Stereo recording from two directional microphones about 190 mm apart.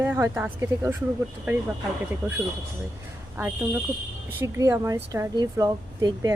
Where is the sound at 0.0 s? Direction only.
10° right (ahead or behind).